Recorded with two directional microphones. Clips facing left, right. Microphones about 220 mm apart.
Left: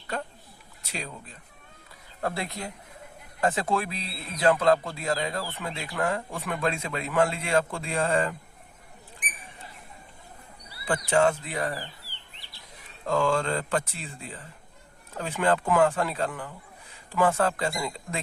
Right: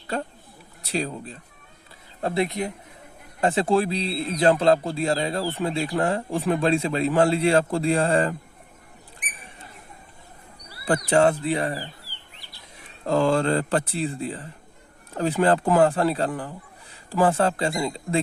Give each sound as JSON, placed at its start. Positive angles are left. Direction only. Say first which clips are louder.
{"t": 0.8, "sound": "speech", "louder": "right 10 dB", "side_deg": -35}
{"t": 2.2, "sound": "speech", "louder": "right 7 dB", "side_deg": -20}
{"t": 10.8, "sound": "speech", "louder": "right 4 dB", "side_deg": -40}
{"t": 13.1, "sound": "speech", "louder": "right 5 dB", "side_deg": -35}